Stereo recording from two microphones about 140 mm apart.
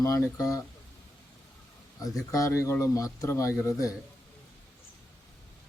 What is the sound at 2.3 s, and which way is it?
Speech, 20° left (ahead or behind).